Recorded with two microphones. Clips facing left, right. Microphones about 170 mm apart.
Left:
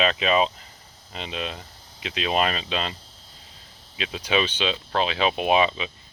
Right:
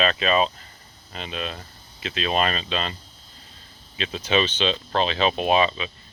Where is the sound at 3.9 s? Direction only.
10° left (ahead or behind).